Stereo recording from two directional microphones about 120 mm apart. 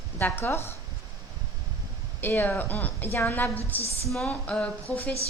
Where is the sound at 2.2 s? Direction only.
15° left (ahead or behind).